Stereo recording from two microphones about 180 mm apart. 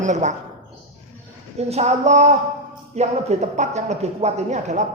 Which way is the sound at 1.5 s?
35° right (ahead or behind).